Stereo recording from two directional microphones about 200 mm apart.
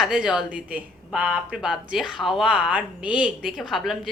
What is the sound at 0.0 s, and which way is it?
Speech, 5° right (ahead or behind).